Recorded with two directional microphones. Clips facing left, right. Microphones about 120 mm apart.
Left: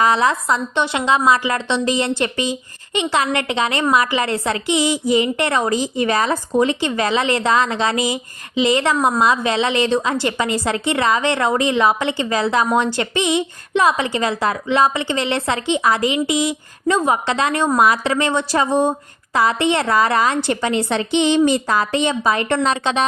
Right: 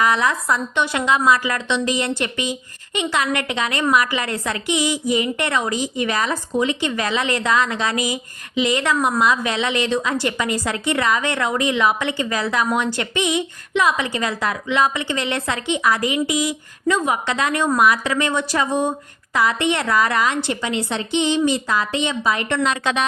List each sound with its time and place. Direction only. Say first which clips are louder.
0.0 s a woman's voice: left 3 dB; 30° left (ahead or behind)
20.5 s a woman's voice: left 4 dB; 45° left (ahead or behind)
20.9 s speech: left 3 dB; 80° left; by 22.8 s 35° left (ahead or behind)
22.8 s a woman's voice: left 2 dB; 25° left (ahead or behind)